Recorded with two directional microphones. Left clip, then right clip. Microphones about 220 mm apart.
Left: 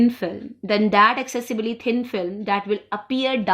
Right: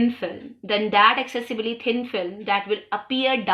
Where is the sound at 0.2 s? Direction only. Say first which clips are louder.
Left 2 dB; 65° left (ahead or behind).